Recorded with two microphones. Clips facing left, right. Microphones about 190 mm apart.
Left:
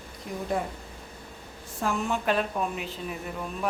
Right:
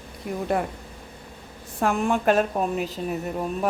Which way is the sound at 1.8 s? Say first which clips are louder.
Right 6 dB; 55° right (ahead or behind).